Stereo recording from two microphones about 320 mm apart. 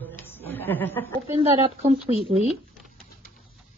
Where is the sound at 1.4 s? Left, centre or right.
Centre.